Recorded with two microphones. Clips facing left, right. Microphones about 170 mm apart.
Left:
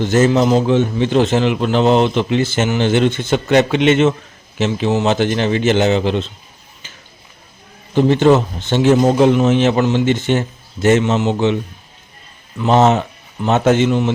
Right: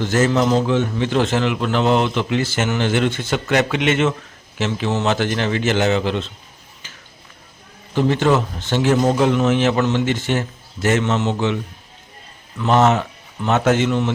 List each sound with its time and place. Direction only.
0.0 s a man's voice: 20° left (ahead or behind)
7.9 s a man's voice: 25° left (ahead or behind)